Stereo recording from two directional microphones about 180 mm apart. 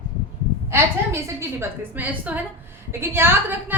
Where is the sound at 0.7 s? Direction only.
15° right (ahead or behind).